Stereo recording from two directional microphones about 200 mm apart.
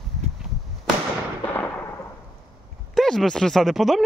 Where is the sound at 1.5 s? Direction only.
10° left (ahead or behind).